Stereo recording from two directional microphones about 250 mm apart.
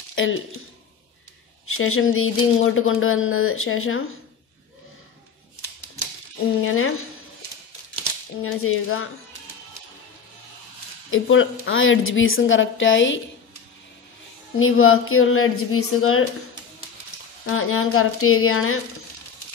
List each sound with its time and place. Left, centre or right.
0.1 s a sound: left
1.7 s speech: left
6.6 s speech: left
8.4 s speech: left
11.1 s a woman's voice: left
14.6 s speech: left
17.5 s speech: left